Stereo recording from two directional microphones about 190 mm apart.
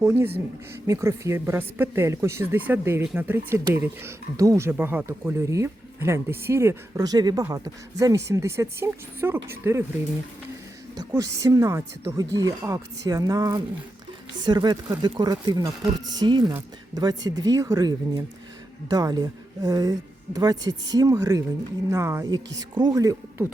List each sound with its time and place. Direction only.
0.0 s speech: 15° right (ahead or behind)
10.9 s speech: 20° right (ahead or behind)